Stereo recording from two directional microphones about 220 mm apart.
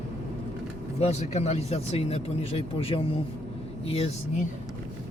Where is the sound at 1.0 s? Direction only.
30° left (ahead or behind).